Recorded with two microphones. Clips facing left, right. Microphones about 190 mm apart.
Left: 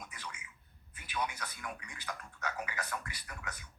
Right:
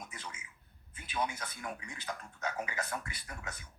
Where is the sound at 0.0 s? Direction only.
25° right (ahead or behind).